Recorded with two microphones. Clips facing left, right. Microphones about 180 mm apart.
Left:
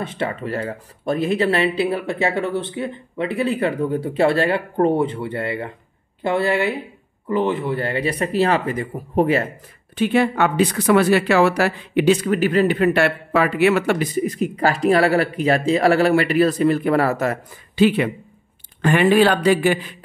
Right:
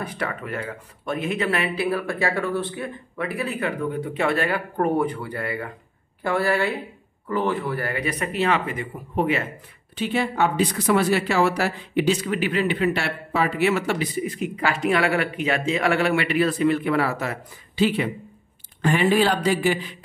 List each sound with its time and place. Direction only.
0.0 s speech: 25° left (ahead or behind)
9.9 s speech: 60° left (ahead or behind)